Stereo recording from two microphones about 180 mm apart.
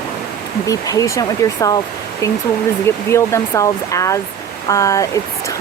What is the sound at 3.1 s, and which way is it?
Speech, 15° left (ahead or behind).